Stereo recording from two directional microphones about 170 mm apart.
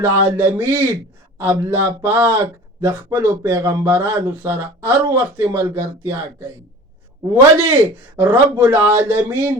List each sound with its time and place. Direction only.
0.0 s speech: 15° right (ahead or behind)
7.7 s speech: 15° right (ahead or behind)